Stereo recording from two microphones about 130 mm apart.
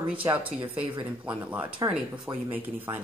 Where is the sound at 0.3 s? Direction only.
15° right (ahead or behind).